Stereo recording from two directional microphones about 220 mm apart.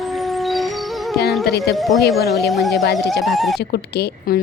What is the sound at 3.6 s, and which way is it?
Speech, 50° left (ahead or behind).